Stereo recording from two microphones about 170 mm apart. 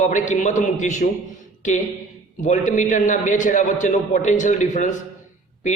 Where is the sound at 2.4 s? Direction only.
50° left (ahead or behind).